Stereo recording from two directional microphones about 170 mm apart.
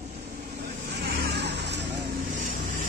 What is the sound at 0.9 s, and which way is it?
Vehicle, 70° right (ahead or behind).